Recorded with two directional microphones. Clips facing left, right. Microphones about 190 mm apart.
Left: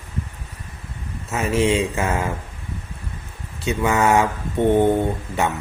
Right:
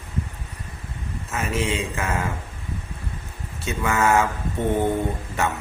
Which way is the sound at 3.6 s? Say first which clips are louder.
Left 3 dB; 20° left (ahead or behind).